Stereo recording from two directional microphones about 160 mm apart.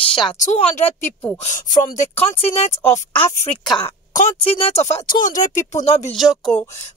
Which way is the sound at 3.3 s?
45° left (ahead or behind).